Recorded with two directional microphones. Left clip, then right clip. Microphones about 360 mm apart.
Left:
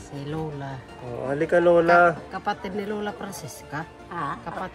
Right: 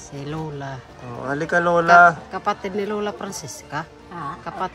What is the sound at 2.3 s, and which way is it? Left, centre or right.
Speech, right.